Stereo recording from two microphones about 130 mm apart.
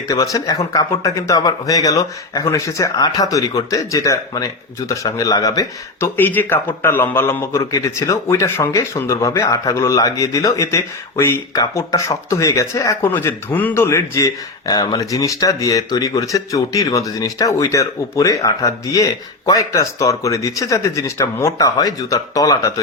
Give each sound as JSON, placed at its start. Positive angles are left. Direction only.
{"t": 0.1, "sound": "a man's voice", "side_deg": 25}
{"t": 6.1, "sound": "a man's voice", "side_deg": 15}